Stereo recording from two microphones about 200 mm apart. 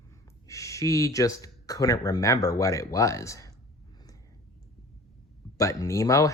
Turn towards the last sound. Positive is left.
turn(degrees=15)  # may be behind; listen again after turning